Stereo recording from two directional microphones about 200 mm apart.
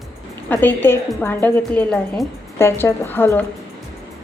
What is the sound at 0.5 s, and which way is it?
A woman's voice, 10° left (ahead or behind).